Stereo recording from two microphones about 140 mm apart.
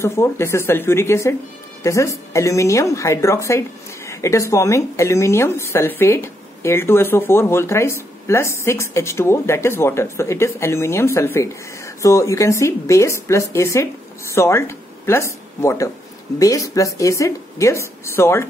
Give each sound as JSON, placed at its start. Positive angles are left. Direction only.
{"t": 0.0, "sound": "a woman's voice", "side_deg": 20}